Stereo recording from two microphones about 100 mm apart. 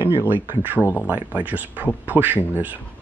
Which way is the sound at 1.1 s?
15° right (ahead or behind).